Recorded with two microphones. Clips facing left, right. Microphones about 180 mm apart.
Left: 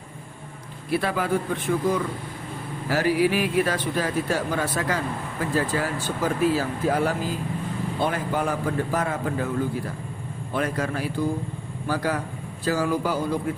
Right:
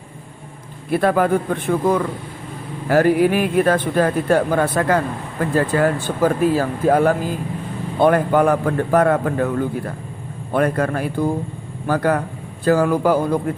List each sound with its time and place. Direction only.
0.9 s a man's voice: 50° right (ahead or behind)